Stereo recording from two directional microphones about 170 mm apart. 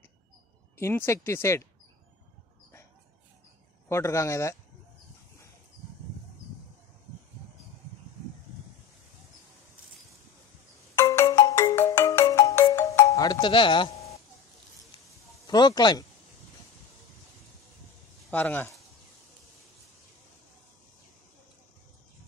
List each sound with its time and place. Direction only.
0.7 s speech: 15° left (ahead or behind)
3.9 s speech: 15° left (ahead or behind)
11.0 s ringtone: 15° left (ahead or behind)
12.7 s music: 15° left (ahead or behind)
15.4 s speech: 25° left (ahead or behind)
18.3 s speech: 10° left (ahead or behind)